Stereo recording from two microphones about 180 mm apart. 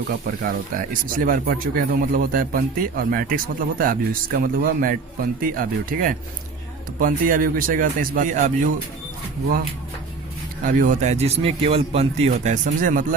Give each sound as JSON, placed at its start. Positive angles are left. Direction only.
{"t": 0.1, "sound": "speech", "side_deg": -50}
{"t": 10.6, "sound": "speech", "side_deg": -50}